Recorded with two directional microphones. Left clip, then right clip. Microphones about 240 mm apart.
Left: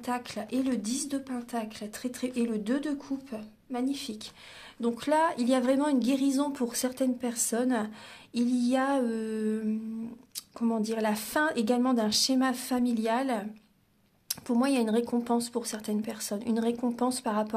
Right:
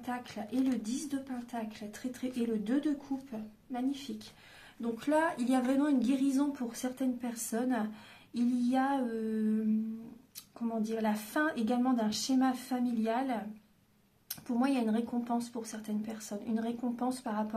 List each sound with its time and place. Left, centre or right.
0.0 s speech: left
8.4 s female singing: left
10.3 s speech: left